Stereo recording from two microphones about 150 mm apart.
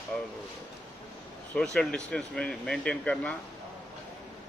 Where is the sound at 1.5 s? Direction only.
5° left (ahead or behind).